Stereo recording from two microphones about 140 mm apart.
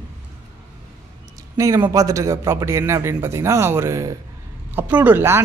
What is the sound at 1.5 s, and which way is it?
Speech, 20° right (ahead or behind).